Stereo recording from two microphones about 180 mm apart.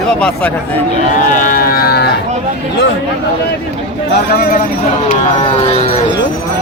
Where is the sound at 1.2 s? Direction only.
50° left (ahead or behind).